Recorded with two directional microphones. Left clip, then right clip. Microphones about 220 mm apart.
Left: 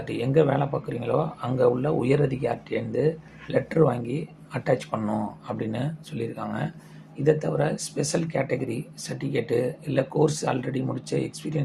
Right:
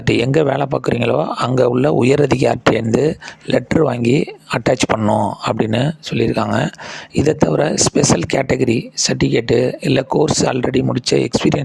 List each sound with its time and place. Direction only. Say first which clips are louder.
0.0 s speech: right 8 dB; 45° right (ahead or behind)